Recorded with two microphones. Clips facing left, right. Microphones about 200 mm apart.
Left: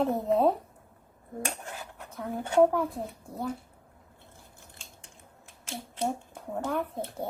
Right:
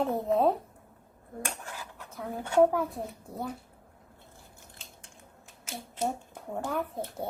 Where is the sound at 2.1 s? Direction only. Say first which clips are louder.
Left 2 dB; centre (ahead or behind).